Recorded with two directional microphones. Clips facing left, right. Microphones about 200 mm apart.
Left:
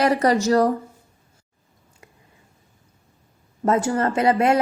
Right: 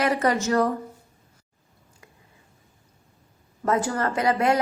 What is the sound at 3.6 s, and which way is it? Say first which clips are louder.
Speech: left 4 dB; 25° left (ahead or behind).